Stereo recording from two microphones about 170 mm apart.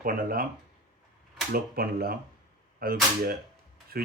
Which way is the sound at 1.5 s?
60° right (ahead or behind).